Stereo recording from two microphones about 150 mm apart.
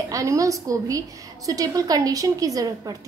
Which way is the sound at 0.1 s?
20° right (ahead or behind).